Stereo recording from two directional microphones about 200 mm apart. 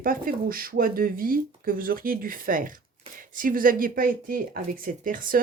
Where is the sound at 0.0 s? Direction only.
45° right (ahead or behind).